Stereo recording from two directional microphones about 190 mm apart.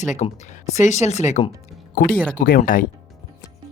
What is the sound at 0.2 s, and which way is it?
Speech, 35° left (ahead or behind).